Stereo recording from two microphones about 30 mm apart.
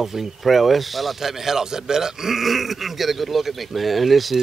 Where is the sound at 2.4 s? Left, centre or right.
Centre.